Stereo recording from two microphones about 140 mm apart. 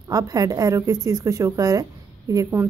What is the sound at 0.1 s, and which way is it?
Speech, 25° right (ahead or behind).